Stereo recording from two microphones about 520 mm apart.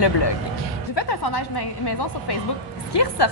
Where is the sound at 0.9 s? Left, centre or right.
Left.